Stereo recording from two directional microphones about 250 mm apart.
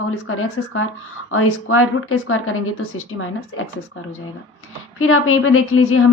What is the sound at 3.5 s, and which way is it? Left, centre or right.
Speech, left.